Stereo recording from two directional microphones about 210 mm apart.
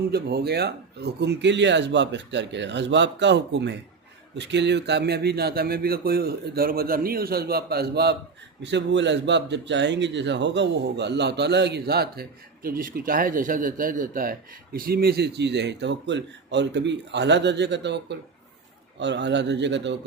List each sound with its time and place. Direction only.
0.1 s a man's voice: 50° right (ahead or behind)